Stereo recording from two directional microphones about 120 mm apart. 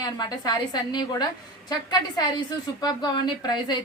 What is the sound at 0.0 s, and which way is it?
A woman's voice, 35° left (ahead or behind).